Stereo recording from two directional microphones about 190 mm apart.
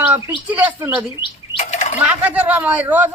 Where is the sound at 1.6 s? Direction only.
40° left (ahead or behind).